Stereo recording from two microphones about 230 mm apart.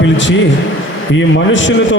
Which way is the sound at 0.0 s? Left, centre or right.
Left.